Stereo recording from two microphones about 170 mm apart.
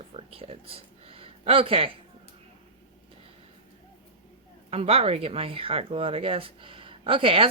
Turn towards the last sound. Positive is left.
turn(degrees=-30)  # may be behind; listen again after turning